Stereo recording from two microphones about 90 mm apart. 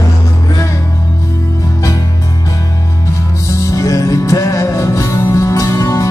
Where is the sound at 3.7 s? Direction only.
35° left (ahead or behind).